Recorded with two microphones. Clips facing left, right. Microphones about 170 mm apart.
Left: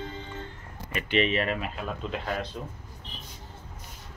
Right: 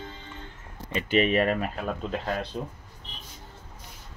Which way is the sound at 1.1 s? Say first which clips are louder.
Right 3 dB; 45° right (ahead or behind).